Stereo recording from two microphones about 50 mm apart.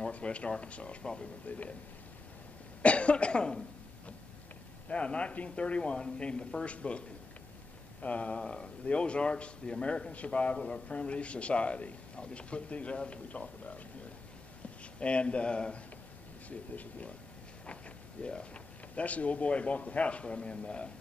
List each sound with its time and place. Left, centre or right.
0.0 s speech: left
1.5 s speech: left
2.8 s speech: left
4.8 s speech: left
15.0 s speech: left